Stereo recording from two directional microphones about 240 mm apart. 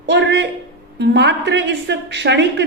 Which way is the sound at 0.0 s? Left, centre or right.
Right.